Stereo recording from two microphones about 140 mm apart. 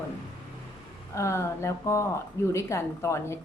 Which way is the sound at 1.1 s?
20° left (ahead or behind).